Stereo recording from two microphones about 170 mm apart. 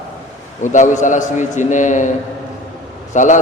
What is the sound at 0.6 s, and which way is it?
A man's voice, 45° left (ahead or behind).